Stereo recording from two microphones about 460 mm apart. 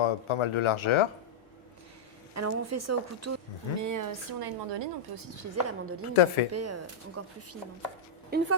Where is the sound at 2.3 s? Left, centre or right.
Right.